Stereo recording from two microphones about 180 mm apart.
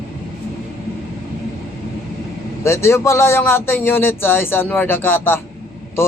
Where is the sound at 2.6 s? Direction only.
15° left (ahead or behind).